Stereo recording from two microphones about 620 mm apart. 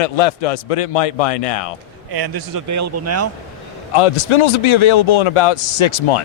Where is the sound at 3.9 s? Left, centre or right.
Left.